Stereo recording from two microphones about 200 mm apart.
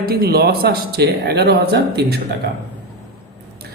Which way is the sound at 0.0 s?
50° right (ahead or behind).